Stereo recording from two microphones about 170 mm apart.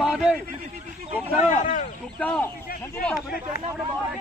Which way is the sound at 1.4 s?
50° left (ahead or behind).